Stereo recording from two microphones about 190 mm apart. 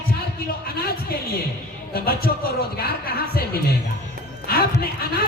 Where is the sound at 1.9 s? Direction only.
50° left (ahead or behind).